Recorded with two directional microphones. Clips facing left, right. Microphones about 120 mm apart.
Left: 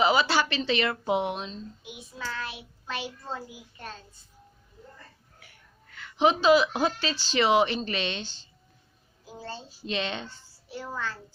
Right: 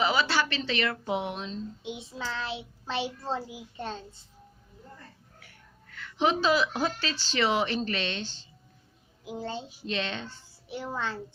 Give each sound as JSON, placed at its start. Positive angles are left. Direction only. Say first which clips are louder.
{"t": 0.0, "sound": "speech", "louder": "left 3 dB", "side_deg": 20}
{"t": 1.8, "sound": "child singing", "louder": "right 3 dB", "side_deg": -25}
{"t": 6.0, "sound": "a woman's voice", "louder": "left 3 dB", "side_deg": 15}
{"t": 9.2, "sound": "a child's voice", "louder": "right 5 dB", "side_deg": -20}
{"t": 9.8, "sound": "a woman's voice", "louder": "left 2 dB", "side_deg": 10}
{"t": 10.7, "sound": "child singing", "louder": "right 2 dB", "side_deg": -20}